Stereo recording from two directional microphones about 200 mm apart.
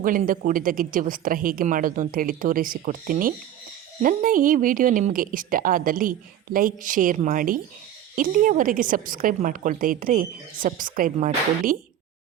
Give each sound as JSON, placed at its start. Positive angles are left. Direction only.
{"t": 0.0, "sound": "a woman's voice", "side_deg": -45}